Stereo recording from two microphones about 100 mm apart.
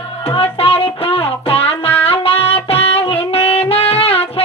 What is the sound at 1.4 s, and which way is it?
Music, 75° left (ahead or behind).